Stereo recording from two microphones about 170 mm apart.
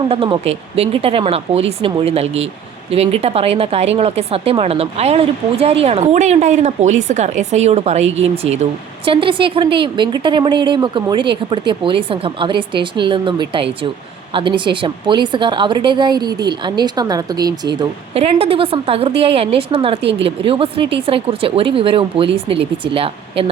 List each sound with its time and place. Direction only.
0.1 s a woman's voice: 35° right (ahead or behind)
17.7 s a woman's voice: 35° right (ahead or behind)